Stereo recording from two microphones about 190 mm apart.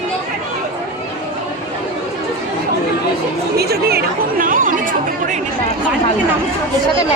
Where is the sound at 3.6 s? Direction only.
55° right (ahead or behind).